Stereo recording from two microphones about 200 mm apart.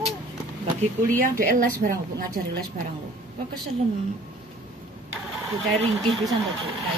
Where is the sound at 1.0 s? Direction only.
45° right (ahead or behind).